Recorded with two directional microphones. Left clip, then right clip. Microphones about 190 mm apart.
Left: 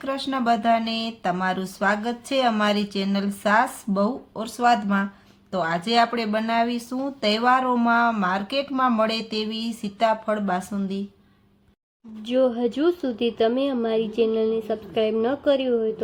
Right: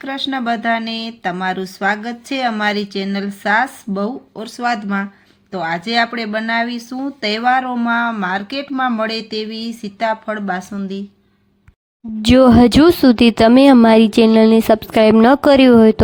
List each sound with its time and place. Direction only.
0.0 s speech: 10° right (ahead or behind)
12.2 s speech: 65° right (ahead or behind)